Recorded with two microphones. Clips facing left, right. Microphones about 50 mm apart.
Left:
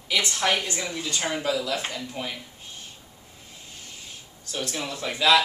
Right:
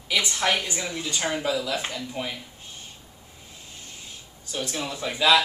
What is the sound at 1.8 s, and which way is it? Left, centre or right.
Speech, centre.